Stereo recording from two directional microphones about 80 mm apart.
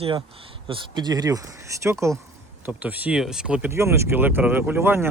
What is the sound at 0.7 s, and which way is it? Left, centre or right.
Speech, right.